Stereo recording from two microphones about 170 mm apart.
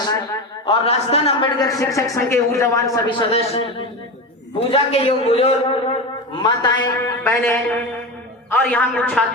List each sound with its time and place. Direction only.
0.6 s a man's voice: 35° left (ahead or behind)
4.7 s a man's voice: 35° left (ahead or behind)
6.4 s a man's voice: 20° left (ahead or behind); by 9.2 s 5° left (ahead or behind)